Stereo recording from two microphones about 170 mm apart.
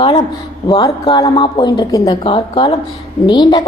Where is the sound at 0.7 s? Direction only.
25° left (ahead or behind).